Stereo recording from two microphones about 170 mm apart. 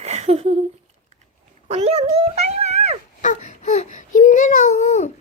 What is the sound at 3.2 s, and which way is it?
Speech, 45° left (ahead or behind).